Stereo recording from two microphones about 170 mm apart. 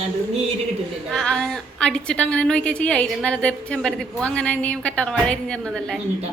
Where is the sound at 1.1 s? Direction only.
5° left (ahead or behind).